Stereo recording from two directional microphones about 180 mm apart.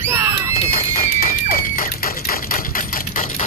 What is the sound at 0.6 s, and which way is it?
Music, 50° left (ahead or behind).